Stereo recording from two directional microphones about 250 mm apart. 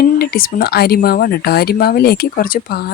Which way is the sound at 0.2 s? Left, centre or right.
Left.